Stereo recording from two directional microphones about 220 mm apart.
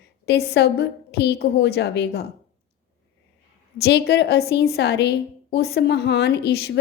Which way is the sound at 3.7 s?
45° left (ahead or behind).